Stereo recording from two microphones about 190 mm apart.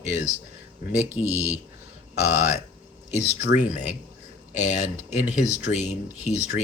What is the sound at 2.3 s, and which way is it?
Speech, 35° left (ahead or behind).